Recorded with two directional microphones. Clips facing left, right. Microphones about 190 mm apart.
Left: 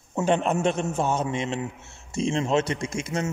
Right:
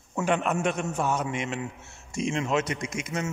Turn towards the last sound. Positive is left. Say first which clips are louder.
# left 3 dB
turn(degrees=30)  # may be behind; listen again after turning